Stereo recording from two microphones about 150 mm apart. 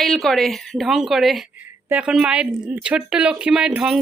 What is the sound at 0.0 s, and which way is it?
Speech, centre (ahead or behind).